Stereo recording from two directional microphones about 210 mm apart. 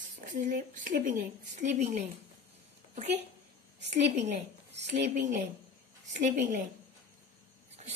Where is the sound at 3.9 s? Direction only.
30° right (ahead or behind).